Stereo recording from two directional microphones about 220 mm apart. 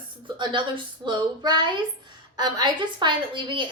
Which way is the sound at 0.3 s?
20° right (ahead or behind).